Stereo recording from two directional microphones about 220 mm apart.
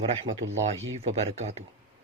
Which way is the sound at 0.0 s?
25° right (ahead or behind).